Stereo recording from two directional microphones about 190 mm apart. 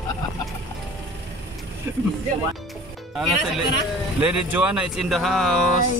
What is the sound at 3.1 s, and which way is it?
Speech, centre (ahead or behind).